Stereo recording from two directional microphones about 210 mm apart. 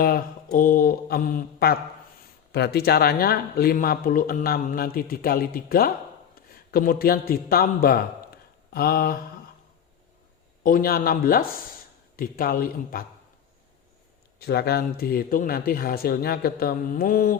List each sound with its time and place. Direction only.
0.5 s a man's voice: 40° left (ahead or behind)
10.6 s speech: 40° left (ahead or behind)
14.3 s speech: 50° left (ahead or behind)